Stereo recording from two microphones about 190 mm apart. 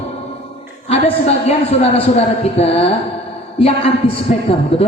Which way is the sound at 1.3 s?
35° left (ahead or behind).